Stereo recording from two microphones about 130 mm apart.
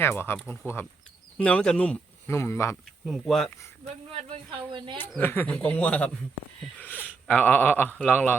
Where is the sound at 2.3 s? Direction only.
20° left (ahead or behind).